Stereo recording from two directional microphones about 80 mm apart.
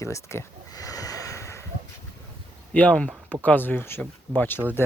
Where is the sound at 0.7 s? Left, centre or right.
Left.